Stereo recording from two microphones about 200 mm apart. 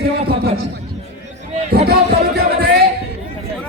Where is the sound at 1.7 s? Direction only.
50° right (ahead or behind).